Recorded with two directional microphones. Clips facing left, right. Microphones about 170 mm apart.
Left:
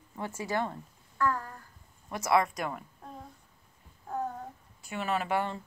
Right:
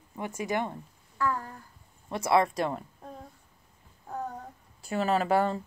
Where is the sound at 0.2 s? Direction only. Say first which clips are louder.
Right 2 dB; 15° right (ahead or behind).